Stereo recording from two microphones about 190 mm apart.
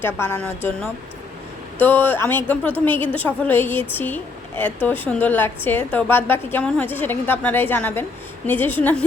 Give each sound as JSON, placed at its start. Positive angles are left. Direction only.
{"t": 0.0, "sound": "a woman's voice", "side_deg": 10}